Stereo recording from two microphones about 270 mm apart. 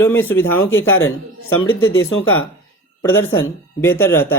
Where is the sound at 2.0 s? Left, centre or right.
Left.